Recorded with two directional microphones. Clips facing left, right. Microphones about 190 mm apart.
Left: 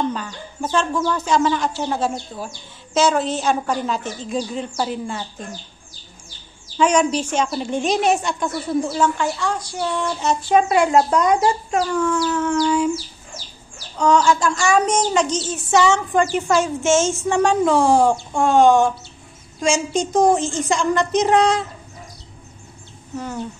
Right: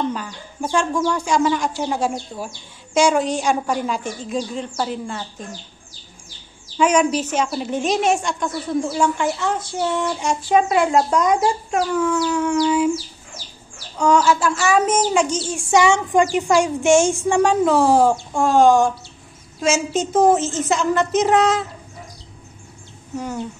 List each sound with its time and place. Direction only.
0.1 s a child's voice: 10° right (ahead or behind)
4.3 s a woman's voice: centre (ahead or behind)
6.8 s a woman's voice: 10° right (ahead or behind)
8.9 s speech: 15° right (ahead or behind)
10.5 s a woman's voice: centre (ahead or behind)
13.9 s a child's voice: 10° right (ahead or behind)